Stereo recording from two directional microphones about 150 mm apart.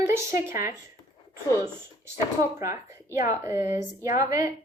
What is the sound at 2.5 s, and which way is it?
A woman's voice, 20° right (ahead or behind).